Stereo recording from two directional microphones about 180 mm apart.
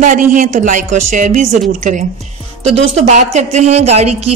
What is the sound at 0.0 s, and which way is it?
A woman's voice, 45° right (ahead or behind).